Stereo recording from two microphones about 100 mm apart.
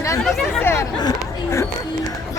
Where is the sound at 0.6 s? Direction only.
25° left (ahead or behind).